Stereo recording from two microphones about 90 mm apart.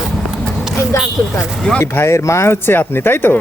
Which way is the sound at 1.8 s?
25° left (ahead or behind).